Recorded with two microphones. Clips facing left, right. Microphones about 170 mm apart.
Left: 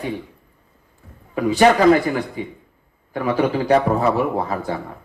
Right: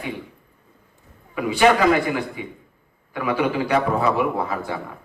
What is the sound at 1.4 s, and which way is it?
A man's voice, 40° left (ahead or behind).